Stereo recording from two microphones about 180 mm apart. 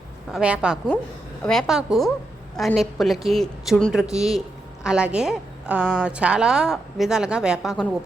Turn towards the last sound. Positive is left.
turn(degrees=0)  # may be behind; listen again after turning